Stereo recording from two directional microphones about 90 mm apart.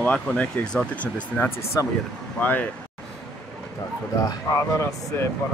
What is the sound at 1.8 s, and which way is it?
Speech, 40° left (ahead or behind).